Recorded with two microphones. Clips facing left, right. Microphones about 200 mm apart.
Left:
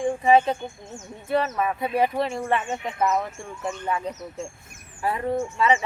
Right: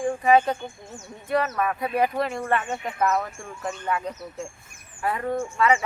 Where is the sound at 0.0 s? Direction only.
25° left (ahead or behind).